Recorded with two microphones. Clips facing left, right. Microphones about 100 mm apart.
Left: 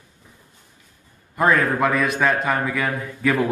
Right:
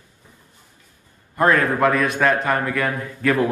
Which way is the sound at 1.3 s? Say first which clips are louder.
Right 1 dB; centre (ahead or behind).